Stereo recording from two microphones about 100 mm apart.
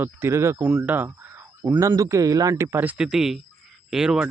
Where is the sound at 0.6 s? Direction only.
15° right (ahead or behind).